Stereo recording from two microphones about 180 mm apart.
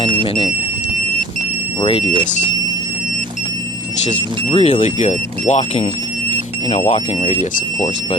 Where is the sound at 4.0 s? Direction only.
35° left (ahead or behind).